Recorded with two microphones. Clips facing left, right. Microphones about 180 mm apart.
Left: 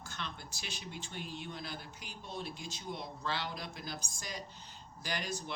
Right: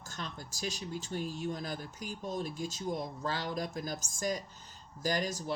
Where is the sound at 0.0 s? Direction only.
40° right (ahead or behind).